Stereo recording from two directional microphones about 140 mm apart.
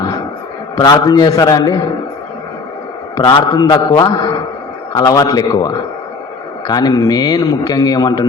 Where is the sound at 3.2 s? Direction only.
30° left (ahead or behind).